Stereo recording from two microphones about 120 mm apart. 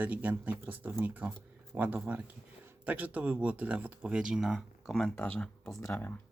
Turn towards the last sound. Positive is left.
turn(degrees=20)  # may be behind; listen again after turning